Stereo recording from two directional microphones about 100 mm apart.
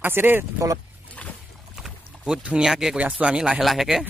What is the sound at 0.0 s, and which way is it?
Speech, 20° right (ahead or behind).